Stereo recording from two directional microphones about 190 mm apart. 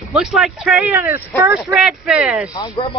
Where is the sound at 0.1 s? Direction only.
Centre (ahead or behind).